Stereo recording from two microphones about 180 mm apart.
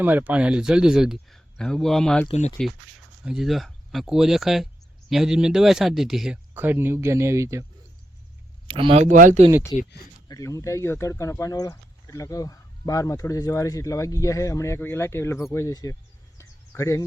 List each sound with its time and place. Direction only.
0.0 s speech: 10° right (ahead or behind)
8.6 s speech: 30° right (ahead or behind); by 9.4 s 45° right (ahead or behind)
9.7 s speech: 30° left (ahead or behind)
16.4 s a sound: 15° left (ahead or behind)